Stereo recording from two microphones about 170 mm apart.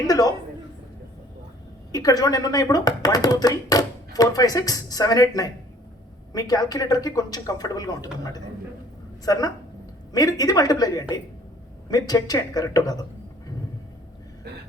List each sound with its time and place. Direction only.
0.1 s speech: 20° left (ahead or behind)
1.9 s speech: 20° left (ahead or behind)